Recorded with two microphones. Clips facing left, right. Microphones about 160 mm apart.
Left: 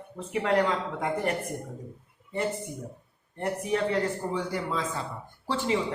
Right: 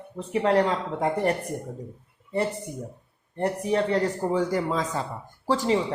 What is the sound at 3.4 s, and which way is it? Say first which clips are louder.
A woman's voice: right 3 dB; 35° right (ahead or behind).